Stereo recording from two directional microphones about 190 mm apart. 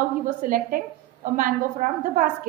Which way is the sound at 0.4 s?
45° right (ahead or behind).